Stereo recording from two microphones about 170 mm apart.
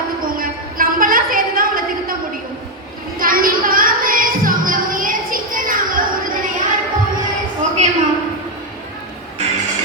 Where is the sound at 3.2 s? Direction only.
55° right (ahead or behind).